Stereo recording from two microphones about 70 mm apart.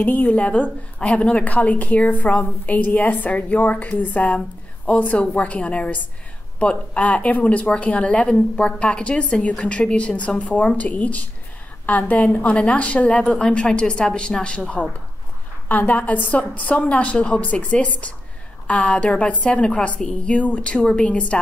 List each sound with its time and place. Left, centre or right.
0.0 s a woman's voice: left
15.7 s a woman's voice: left